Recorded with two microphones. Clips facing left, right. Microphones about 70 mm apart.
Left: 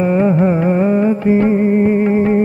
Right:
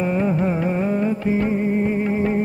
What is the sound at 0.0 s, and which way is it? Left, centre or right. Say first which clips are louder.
Music: left 7 dB; left.